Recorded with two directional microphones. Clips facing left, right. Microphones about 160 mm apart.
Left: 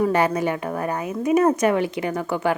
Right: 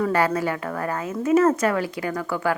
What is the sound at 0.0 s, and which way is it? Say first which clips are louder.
Speech: left 2 dB; 20° left (ahead or behind).